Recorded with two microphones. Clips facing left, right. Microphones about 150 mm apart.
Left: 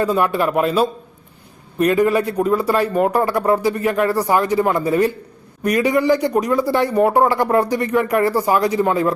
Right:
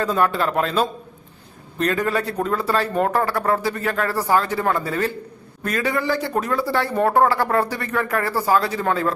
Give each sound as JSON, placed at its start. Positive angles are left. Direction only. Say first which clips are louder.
{"t": 0.0, "sound": "speech", "louder": "left 3 dB", "side_deg": 10}